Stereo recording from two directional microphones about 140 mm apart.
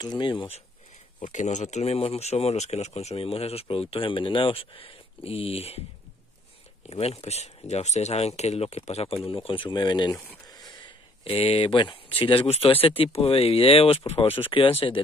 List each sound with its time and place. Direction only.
0.0 s speech: 30° left (ahead or behind)
1.2 s speech: 60° left (ahead or behind)
6.9 s speech: 45° left (ahead or behind); by 10.1 s 30° left (ahead or behind)
10.1 s speech: 15° left (ahead or behind)
11.2 s speech: 45° left (ahead or behind)